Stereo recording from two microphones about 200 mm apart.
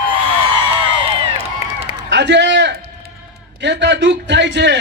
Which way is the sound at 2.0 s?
60° right (ahead or behind).